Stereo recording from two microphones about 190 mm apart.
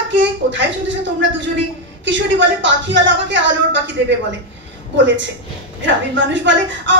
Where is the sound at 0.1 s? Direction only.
70° right (ahead or behind).